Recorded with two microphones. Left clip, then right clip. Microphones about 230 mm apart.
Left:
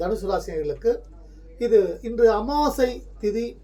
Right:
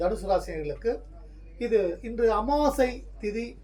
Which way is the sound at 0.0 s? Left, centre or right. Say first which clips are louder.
Left 1 dB; centre.